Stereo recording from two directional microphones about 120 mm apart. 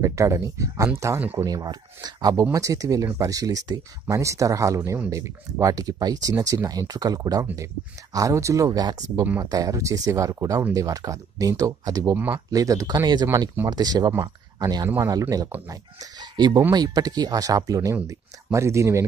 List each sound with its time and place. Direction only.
0.0 s speech: 25° right (ahead or behind)